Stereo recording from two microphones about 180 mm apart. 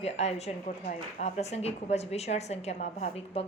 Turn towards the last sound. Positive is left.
turn(degrees=35)  # may be behind; listen again after turning